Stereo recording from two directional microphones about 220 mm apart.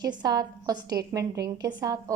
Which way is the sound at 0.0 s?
20° right (ahead or behind).